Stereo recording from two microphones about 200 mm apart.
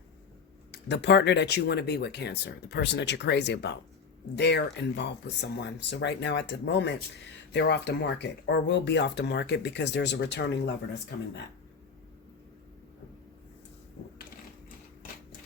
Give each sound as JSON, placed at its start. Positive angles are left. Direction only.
{"t": 0.7, "sound": "speech", "side_deg": 60}